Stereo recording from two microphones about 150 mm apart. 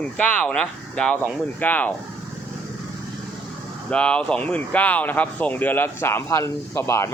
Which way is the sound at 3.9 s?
5° left (ahead or behind).